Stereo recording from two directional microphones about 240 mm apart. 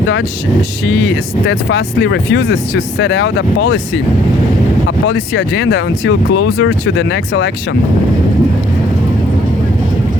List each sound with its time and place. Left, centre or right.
1.5 s speech: left
5.3 s speech: left
6.7 s speech: left